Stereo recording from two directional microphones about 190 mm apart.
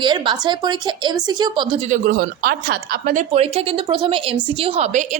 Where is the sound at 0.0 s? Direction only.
25° right (ahead or behind).